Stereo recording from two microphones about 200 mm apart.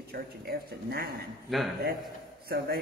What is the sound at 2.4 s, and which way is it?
Speech, 50° right (ahead or behind).